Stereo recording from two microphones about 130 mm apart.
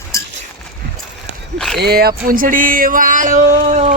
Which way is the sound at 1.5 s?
5° left (ahead or behind).